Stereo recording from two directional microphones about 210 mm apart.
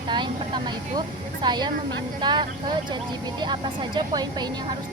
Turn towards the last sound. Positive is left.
turn(degrees=-20)  # may be behind; listen again after turning